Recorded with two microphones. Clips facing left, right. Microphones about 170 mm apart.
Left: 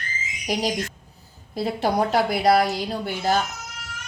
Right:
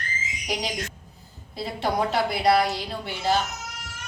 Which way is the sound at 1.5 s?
45° left (ahead or behind).